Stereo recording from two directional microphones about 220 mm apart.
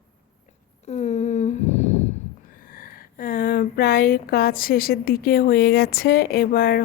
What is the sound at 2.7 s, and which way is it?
Speech, 40° left (ahead or behind).